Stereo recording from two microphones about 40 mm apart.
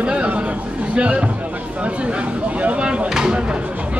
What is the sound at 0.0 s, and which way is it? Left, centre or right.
Chatter, right.